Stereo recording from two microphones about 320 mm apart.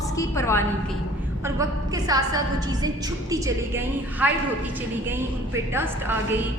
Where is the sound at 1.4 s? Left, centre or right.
Centre.